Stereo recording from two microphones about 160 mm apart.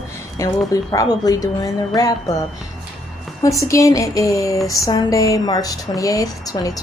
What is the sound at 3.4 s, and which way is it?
A woman's voice, 20° left (ahead or behind).